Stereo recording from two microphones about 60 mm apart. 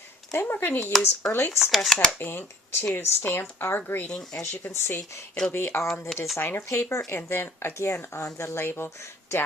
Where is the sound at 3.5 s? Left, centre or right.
Left.